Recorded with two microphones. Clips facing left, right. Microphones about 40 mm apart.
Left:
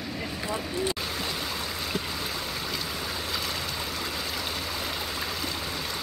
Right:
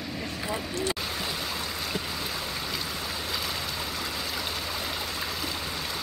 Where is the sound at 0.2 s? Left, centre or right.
Centre.